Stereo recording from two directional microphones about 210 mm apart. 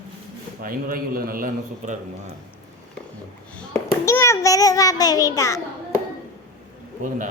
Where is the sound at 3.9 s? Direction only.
15° left (ahead or behind).